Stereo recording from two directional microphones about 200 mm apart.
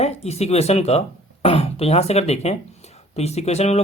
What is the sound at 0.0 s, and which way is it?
Speech, 30° left (ahead or behind).